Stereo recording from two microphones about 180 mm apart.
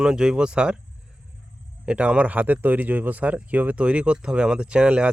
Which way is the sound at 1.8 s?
5° right (ahead or behind).